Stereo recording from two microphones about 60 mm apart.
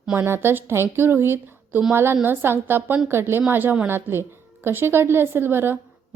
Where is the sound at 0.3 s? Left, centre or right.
Right.